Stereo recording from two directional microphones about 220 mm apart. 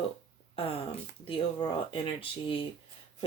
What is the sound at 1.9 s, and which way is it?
Speech, 25° left (ahead or behind).